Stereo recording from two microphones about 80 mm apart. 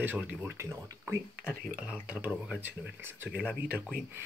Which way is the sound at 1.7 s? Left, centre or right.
Centre.